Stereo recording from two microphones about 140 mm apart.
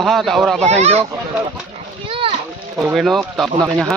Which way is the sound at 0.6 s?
50° right (ahead or behind).